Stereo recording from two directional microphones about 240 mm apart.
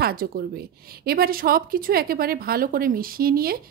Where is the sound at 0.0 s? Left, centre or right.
Right.